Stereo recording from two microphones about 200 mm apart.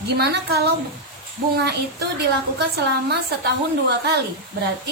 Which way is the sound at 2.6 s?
55° right (ahead or behind).